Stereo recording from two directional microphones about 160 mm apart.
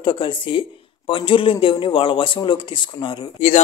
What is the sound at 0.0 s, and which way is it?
Speech, 30° left (ahead or behind).